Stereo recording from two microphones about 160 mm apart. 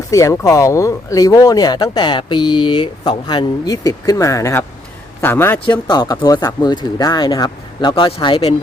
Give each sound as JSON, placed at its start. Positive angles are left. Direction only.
{"t": 0.1, "sound": "a man's voice", "side_deg": 20}
{"t": 5.6, "sound": "speech", "side_deg": 25}